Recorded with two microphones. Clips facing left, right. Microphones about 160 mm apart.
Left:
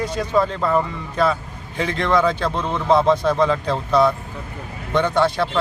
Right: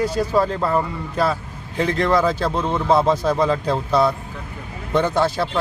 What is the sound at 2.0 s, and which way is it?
Speech, 5° right (ahead or behind).